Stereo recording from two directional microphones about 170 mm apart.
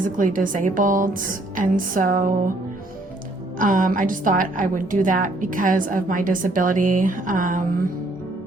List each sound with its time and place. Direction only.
0.0 s a woman's voice: 50° right (ahead or behind)
3.6 s a woman's voice: 50° right (ahead or behind)